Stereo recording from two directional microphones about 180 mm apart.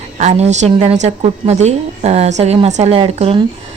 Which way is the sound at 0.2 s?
40° right (ahead or behind).